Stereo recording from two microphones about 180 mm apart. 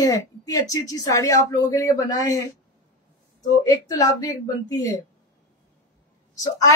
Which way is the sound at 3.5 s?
20° left (ahead or behind).